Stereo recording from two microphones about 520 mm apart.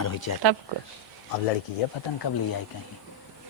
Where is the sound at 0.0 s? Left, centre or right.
Left.